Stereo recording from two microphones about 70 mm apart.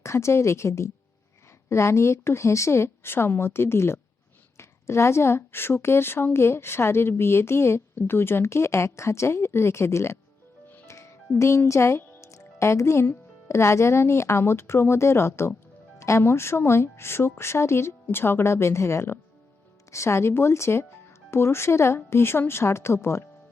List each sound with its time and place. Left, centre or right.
0.0 s a woman's voice: left
10.8 s music: left
11.3 s a woman's voice: left